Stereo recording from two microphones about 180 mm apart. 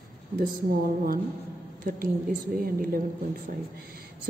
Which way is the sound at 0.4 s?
55° right (ahead or behind).